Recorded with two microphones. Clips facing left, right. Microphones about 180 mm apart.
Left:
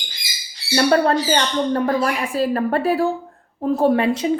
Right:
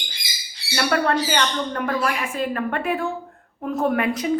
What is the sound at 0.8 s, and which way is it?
A woman's voice, 30° left (ahead or behind).